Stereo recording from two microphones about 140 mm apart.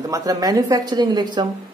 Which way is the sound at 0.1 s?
25° right (ahead or behind).